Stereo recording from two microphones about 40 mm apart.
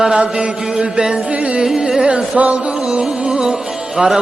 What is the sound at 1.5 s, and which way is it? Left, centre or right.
Mantra, centre.